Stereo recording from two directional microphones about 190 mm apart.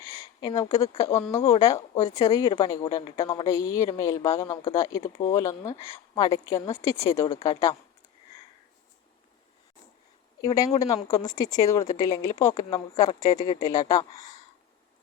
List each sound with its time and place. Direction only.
0.3 s speech: 20° left (ahead or behind)
10.4 s speech: 15° left (ahead or behind)